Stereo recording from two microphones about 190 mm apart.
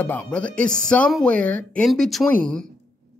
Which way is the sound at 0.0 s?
5° left (ahead or behind).